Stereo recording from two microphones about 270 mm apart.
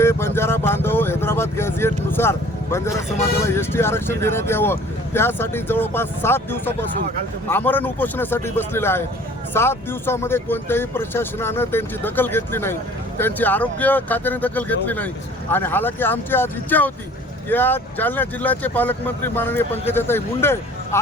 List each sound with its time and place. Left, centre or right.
0.0 s speech: centre